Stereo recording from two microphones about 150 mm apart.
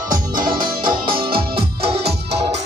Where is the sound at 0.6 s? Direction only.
30° right (ahead or behind).